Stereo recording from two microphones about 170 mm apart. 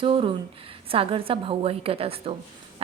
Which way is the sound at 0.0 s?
30° right (ahead or behind).